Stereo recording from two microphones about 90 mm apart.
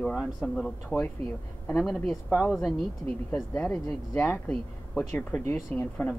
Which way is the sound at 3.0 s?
15° left (ahead or behind).